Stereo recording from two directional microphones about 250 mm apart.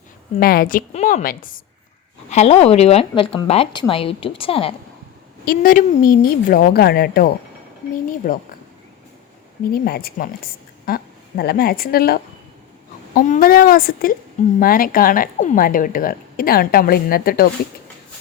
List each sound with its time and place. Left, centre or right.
0.3 s a woman's voice: left
5.5 s speech: left
9.7 s a woman's voice: left